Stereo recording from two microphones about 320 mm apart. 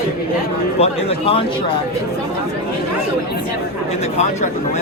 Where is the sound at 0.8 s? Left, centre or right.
Centre.